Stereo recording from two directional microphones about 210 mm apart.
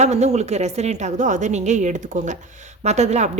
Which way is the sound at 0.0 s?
30° right (ahead or behind).